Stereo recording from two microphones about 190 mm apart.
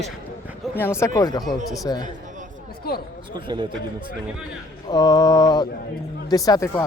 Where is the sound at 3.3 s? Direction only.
25° right (ahead or behind).